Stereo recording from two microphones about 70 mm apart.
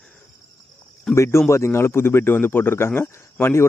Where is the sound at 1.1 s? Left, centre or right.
Left.